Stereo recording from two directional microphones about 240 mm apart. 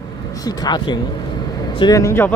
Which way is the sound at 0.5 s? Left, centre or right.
Centre.